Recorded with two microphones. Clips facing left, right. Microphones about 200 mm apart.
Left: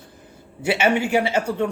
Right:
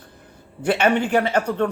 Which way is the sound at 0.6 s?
10° left (ahead or behind).